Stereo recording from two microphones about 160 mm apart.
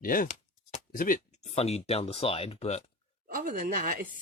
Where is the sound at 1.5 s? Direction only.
40° left (ahead or behind).